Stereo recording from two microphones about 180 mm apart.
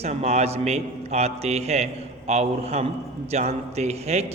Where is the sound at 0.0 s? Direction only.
35° right (ahead or behind).